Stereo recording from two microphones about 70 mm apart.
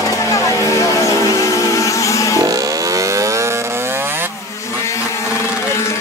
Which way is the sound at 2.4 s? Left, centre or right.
Right.